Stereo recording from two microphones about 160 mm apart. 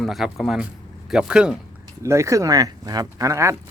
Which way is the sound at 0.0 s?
Centre (ahead or behind).